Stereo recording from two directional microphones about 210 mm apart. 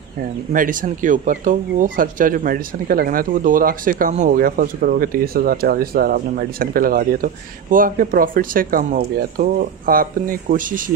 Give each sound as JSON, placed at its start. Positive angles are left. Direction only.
{"t": 0.5, "sound": "speech", "side_deg": -40}